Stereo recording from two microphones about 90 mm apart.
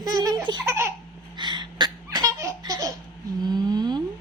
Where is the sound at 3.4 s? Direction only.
50° right (ahead or behind).